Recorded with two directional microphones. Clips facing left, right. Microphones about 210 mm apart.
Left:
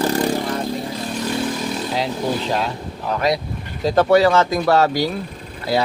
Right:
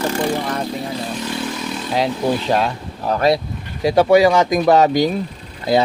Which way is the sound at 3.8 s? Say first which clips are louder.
Right 2 dB; 10° right (ahead or behind).